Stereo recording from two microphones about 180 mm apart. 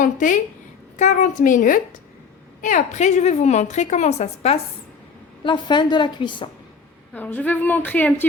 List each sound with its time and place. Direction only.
0.0 s a woman's voice: 45° left (ahead or behind)
5.4 s a woman's voice: 25° left (ahead or behind)
7.1 s a woman's voice: 10° left (ahead or behind)